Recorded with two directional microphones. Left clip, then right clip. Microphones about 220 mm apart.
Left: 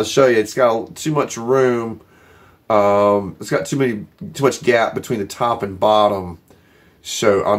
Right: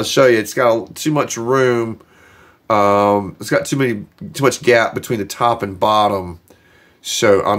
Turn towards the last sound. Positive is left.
turn(degrees=-45)  # may be behind; listen again after turning